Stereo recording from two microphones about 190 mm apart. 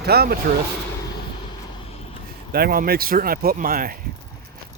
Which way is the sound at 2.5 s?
50° right (ahead or behind).